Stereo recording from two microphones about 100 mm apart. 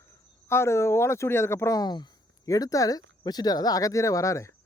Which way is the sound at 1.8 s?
45° left (ahead or behind).